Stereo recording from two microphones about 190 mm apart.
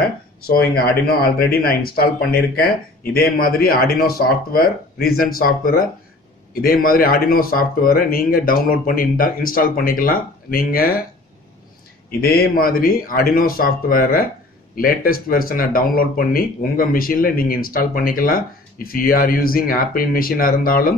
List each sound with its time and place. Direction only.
0.5 s speech: 55° left (ahead or behind)
12.2 s speech: 50° left (ahead or behind)